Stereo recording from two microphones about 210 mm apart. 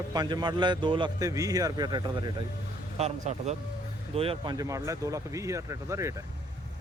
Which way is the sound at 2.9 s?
30° right (ahead or behind).